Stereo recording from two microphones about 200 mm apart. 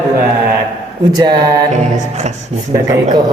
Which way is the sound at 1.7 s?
35° right (ahead or behind).